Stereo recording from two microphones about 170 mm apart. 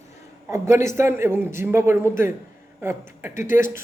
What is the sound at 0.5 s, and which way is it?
A woman's voice, 15° right (ahead or behind).